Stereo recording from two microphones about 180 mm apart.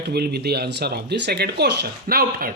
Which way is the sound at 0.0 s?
60° right (ahead or behind).